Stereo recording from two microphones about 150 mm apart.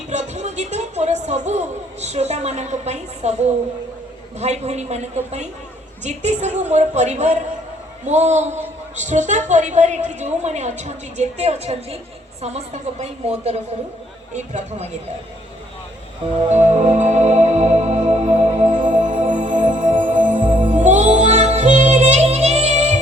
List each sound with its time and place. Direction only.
0.1 s speech: 50° right (ahead or behind)
4.4 s a woman's voice: 45° right (ahead or behind)
16.5 s music: 50° right (ahead or behind)